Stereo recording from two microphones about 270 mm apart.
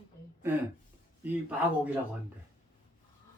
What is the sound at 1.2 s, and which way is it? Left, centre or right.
Speech, centre.